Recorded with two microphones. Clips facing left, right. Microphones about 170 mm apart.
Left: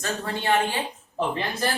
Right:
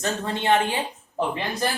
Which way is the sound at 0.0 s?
20° right (ahead or behind).